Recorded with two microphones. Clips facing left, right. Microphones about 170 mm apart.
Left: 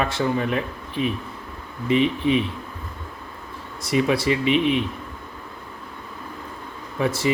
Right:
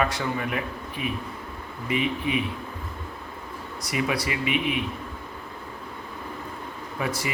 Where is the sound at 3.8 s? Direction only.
30° left (ahead or behind).